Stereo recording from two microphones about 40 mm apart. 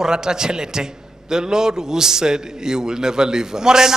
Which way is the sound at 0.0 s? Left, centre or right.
Centre.